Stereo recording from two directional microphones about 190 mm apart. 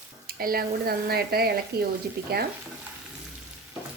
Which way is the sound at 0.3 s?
50° right (ahead or behind).